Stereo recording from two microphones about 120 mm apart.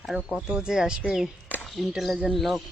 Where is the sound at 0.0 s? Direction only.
5° right (ahead or behind).